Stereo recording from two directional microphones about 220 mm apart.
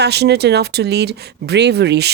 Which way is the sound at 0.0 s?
50° right (ahead or behind).